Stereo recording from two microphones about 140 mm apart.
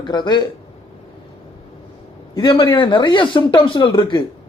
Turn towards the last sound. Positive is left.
turn(degrees=35)  # may be behind; listen again after turning